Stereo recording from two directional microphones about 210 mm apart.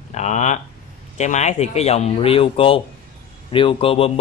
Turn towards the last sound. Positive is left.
turn(degrees=25)  # may be behind; listen again after turning